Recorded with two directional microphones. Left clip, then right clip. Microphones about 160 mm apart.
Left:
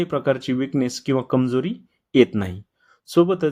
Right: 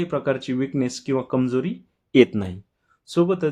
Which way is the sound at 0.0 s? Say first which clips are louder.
Left 2 dB; 30° left (ahead or behind).